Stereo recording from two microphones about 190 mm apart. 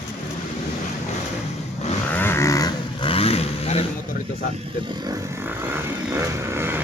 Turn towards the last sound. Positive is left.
turn(degrees=-10)  # may be behind; listen again after turning